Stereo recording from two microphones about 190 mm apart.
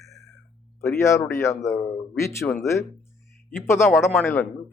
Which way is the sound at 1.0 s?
15° left (ahead or behind).